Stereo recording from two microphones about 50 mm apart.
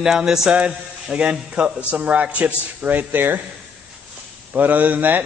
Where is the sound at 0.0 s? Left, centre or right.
Centre.